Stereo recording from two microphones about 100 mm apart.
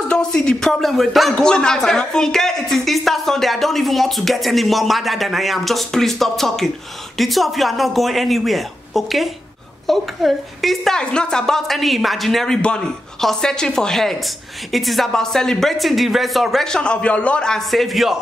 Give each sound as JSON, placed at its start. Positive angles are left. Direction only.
{"t": 0.1, "sound": "a woman's voice", "side_deg": 5}